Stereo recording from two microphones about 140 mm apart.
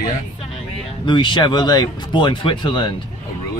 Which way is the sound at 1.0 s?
35° left (ahead or behind).